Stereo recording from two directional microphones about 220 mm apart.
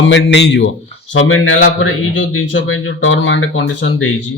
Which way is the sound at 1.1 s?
65° left (ahead or behind).